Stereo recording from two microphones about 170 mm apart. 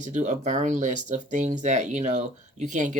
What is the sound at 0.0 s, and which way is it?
Speech, 45° right (ahead or behind).